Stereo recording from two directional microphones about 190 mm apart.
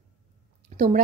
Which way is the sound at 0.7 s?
35° right (ahead or behind).